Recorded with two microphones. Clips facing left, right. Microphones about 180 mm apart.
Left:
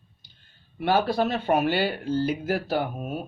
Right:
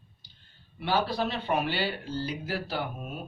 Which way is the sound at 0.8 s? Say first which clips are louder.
Left 5 dB; 50° left (ahead or behind).